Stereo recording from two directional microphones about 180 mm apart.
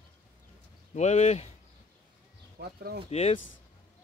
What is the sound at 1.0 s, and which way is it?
Speech, 40° left (ahead or behind).